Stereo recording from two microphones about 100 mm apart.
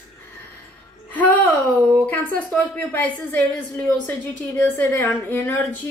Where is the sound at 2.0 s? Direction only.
15° left (ahead or behind).